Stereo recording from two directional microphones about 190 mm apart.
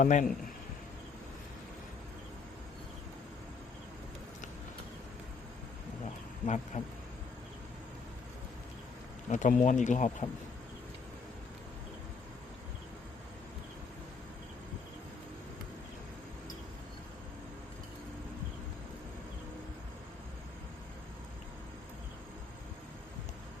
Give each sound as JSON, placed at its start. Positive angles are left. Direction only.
{"t": 0.0, "sound": "speech", "side_deg": 40}
{"t": 6.4, "sound": "speech", "side_deg": 40}
{"t": 9.3, "sound": "speech", "side_deg": 40}